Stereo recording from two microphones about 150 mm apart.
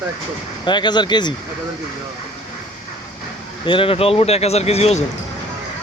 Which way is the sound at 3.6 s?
35° left (ahead or behind).